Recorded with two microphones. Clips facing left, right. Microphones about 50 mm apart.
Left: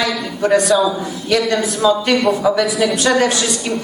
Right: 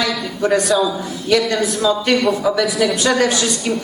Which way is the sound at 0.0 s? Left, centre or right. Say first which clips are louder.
Left 1 dB; centre.